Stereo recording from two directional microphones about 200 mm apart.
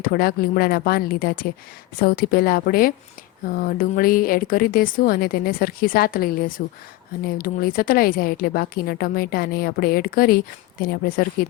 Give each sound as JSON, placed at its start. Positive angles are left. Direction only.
{"t": 0.0, "sound": "a woman's voice", "side_deg": 50}